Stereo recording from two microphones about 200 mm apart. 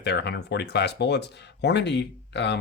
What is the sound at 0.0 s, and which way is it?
Speech, 55° left (ahead or behind).